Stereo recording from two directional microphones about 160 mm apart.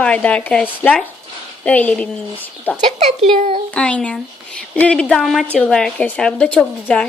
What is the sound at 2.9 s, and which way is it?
Speech, 45° right (ahead or behind).